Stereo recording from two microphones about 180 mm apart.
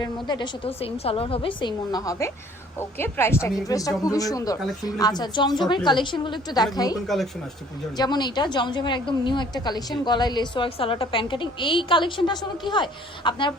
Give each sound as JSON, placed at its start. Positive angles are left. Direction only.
{"t": 0.0, "sound": "a woman's voice", "side_deg": 25}
{"t": 7.1, "sound": "speech", "side_deg": 0}
{"t": 7.9, "sound": "a woman's voice", "side_deg": 25}